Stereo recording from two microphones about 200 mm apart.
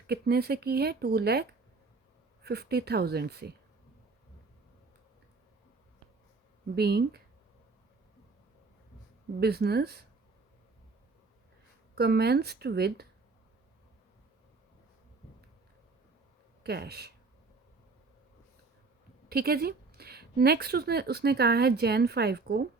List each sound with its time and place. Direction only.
0.1 s speech: 55° right (ahead or behind)
6.7 s speech: 50° right (ahead or behind)
9.4 s speech: 55° right (ahead or behind)
11.9 s speech: 55° right (ahead or behind)
16.6 s speech: 55° right (ahead or behind)
19.3 s speech: 50° right (ahead or behind)